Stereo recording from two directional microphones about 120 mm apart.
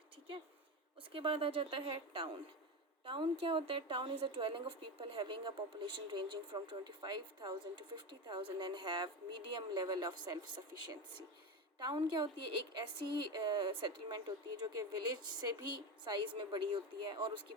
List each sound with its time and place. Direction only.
1.1 s a woman's voice: 50° right (ahead or behind)
11.9 s a woman's voice: 40° right (ahead or behind)